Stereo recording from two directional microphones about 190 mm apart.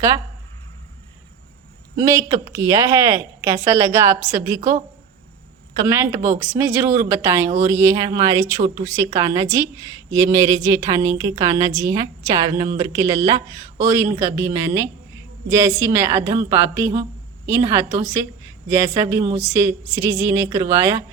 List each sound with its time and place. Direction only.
2.0 s a woman's voice: 15° right (ahead or behind)
5.8 s a woman's voice: 15° right (ahead or behind)